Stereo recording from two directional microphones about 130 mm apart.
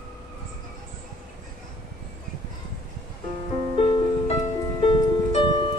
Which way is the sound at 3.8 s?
45° left (ahead or behind).